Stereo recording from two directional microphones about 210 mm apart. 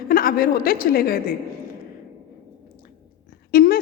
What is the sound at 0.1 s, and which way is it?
A woman's voice, 45° left (ahead or behind).